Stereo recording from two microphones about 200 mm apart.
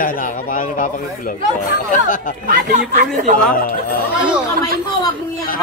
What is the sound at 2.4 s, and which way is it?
Speech, 40° right (ahead or behind).